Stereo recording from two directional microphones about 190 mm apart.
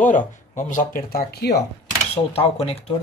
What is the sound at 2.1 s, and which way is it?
Speech, 30° left (ahead or behind).